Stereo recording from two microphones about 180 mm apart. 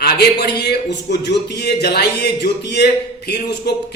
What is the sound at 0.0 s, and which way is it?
A man's voice, 65° left (ahead or behind).